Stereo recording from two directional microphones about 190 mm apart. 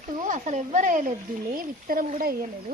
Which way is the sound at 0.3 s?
40° right (ahead or behind).